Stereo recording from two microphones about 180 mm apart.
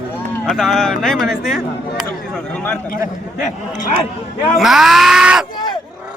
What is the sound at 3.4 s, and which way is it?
Speech, 45° left (ahead or behind).